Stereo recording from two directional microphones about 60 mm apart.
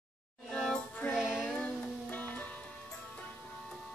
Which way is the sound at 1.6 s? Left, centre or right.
Left.